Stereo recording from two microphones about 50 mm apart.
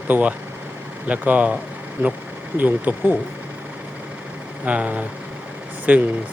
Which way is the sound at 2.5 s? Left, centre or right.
Right.